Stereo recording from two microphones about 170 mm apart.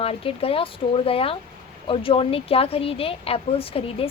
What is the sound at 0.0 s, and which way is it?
A woman's voice, 35° left (ahead or behind).